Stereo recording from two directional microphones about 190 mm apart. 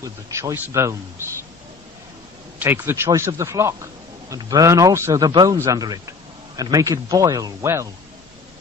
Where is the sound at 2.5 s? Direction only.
10° right (ahead or behind).